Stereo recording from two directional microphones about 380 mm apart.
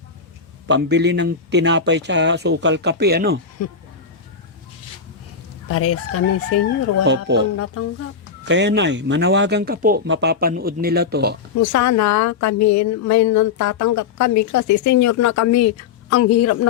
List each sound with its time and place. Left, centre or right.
0.7 s speech: right
3.6 s crowing: left
5.6 s crowing: left
7.0 s speech: right
7.6 s crowing: left
8.4 s speech: right
11.5 s a woman's voice: left